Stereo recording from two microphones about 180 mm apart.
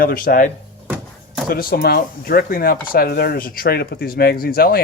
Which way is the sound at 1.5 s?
55° left (ahead or behind).